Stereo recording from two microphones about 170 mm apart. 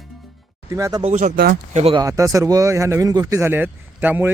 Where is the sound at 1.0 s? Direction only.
45° right (ahead or behind).